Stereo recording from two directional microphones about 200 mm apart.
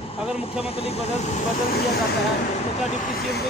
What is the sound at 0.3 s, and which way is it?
Speech, 30° left (ahead or behind).